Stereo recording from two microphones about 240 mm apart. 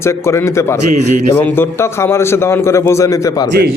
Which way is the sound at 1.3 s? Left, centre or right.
Centre.